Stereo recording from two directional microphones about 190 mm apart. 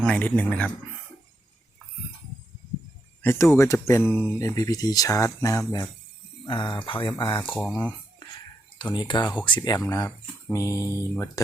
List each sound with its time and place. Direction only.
0.0 s speech: 5° left (ahead or behind)
3.2 s speech: 15° left (ahead or behind)
7.5 s speech: centre (ahead or behind)
8.8 s speech: 25° left (ahead or behind)
9.2 s speech: 5° left (ahead or behind)
9.5 s speech: 20° left (ahead or behind)
10.6 s mantra: 15° right (ahead or behind)
11.1 s speech: 10° left (ahead or behind)